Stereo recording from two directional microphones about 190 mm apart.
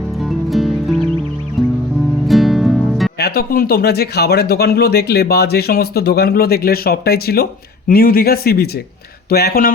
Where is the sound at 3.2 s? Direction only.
55° left (ahead or behind).